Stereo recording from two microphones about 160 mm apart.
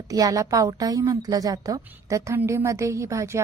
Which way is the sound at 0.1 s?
20° right (ahead or behind).